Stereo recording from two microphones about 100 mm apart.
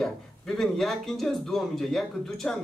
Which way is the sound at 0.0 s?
5° left (ahead or behind).